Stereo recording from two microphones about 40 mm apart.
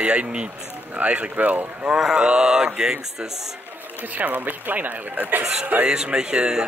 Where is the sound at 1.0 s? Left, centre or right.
Right.